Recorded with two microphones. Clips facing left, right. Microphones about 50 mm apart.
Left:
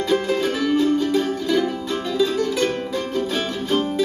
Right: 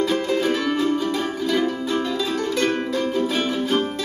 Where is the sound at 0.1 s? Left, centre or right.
Centre.